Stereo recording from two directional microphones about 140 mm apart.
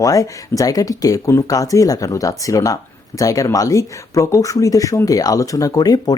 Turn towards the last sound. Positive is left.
turn(degrees=30)  # may be behind; listen again after turning